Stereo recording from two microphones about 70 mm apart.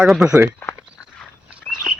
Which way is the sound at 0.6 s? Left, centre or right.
Left.